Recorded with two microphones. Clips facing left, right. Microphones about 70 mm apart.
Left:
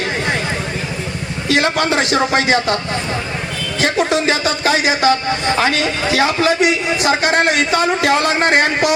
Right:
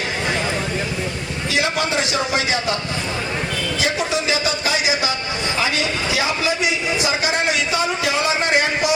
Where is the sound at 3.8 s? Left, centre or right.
Left.